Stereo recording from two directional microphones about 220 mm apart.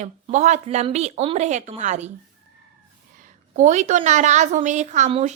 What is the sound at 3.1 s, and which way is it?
A woman's voice, 35° right (ahead or behind).